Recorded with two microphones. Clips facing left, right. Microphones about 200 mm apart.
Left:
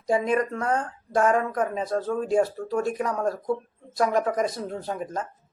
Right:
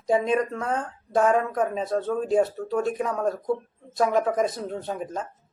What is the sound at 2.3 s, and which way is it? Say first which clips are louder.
Speech: right 1 dB; 25° right (ahead or behind).